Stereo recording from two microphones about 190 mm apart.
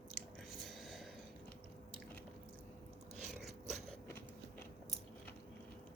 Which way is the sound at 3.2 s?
Centre (ahead or behind).